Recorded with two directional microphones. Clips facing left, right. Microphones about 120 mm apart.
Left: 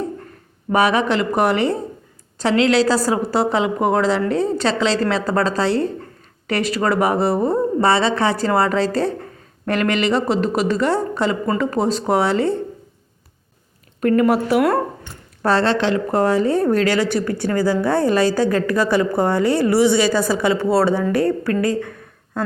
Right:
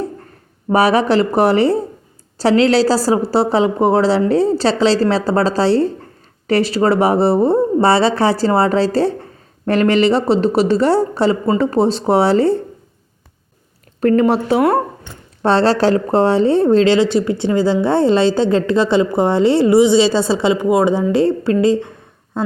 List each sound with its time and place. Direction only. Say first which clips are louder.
0.7 s speech: right 4 dB; 35° right (ahead or behind)
14.0 s a woman's voice: right 2 dB; 30° right (ahead or behind)